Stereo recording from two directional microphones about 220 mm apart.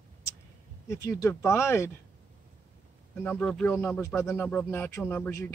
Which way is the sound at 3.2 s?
10° left (ahead or behind).